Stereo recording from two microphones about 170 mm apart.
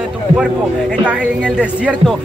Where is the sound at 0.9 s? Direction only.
5° right (ahead or behind).